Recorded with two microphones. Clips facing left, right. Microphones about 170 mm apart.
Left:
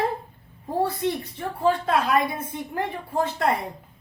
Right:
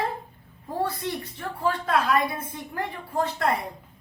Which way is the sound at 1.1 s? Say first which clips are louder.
Left 4 dB; 25° left (ahead or behind).